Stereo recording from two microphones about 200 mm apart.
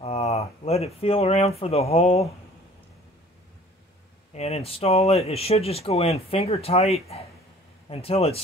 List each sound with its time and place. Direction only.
0.0 s speech: 30° left (ahead or behind)
4.3 s speech: 30° left (ahead or behind)